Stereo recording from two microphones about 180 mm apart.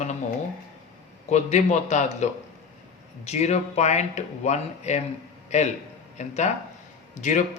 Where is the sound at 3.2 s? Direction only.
35° left (ahead or behind).